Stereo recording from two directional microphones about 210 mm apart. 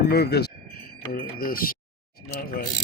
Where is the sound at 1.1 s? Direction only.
45° left (ahead or behind).